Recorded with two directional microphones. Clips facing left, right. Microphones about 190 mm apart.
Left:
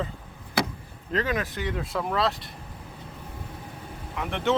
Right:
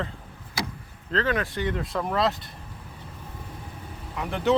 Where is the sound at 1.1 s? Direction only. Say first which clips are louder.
Right 2 dB; 15° left (ahead or behind).